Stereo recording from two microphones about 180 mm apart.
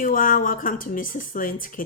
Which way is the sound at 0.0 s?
50° left (ahead or behind).